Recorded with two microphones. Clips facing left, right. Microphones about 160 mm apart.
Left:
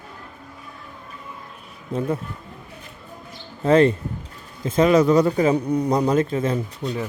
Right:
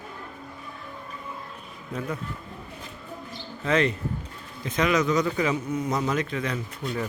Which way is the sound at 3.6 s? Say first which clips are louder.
Left 8 dB; 35° left (ahead or behind).